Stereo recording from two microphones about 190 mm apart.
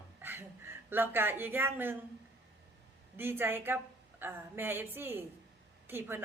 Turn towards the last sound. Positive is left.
turn(degrees=-10)  # may be behind; listen again after turning